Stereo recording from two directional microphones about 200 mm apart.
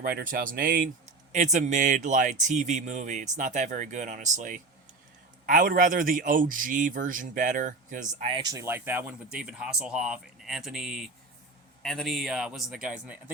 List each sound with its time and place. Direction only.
0.0 s speech: 45° right (ahead or behind)
8.4 s speech: 15° right (ahead or behind)